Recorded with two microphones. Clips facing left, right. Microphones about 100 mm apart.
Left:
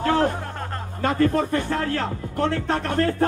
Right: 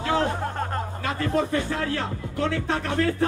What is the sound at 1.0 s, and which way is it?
Speech, 45° left (ahead or behind).